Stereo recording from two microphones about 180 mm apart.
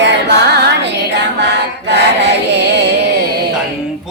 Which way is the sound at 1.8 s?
75° right (ahead or behind).